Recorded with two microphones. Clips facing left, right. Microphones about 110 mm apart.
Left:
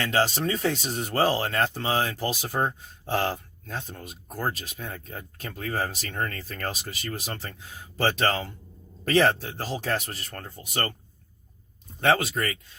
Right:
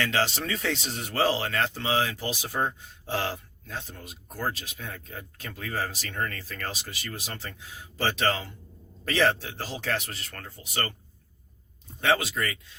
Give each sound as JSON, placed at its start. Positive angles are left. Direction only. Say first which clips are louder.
{"t": 0.0, "sound": "speech", "louder": "left 3 dB", "side_deg": 40}
{"t": 11.9, "sound": "speech", "louder": "left 2 dB", "side_deg": 40}